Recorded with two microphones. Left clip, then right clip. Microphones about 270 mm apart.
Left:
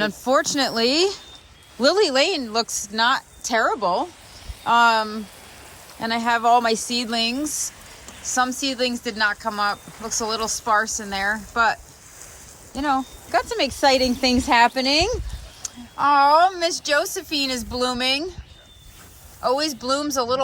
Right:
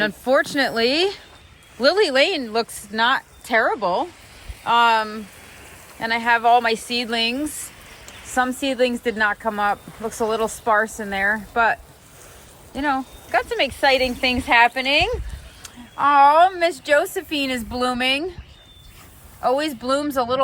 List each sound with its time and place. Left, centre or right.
0.0 s a woman's voice: centre
19.4 s a woman's voice: centre